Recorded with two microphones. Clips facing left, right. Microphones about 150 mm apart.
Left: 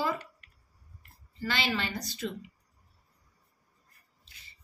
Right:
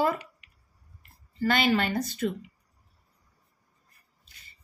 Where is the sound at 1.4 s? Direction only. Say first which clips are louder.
Right 8 dB; 50° right (ahead or behind).